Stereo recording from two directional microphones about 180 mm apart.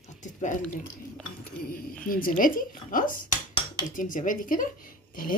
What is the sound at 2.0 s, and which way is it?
Speech, 50° left (ahead or behind).